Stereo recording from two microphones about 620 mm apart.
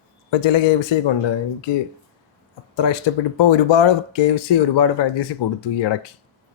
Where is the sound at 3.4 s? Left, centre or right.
Left.